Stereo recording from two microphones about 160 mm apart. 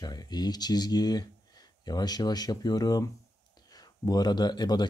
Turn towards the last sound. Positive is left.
turn(degrees=25)  # may be behind; listen again after turning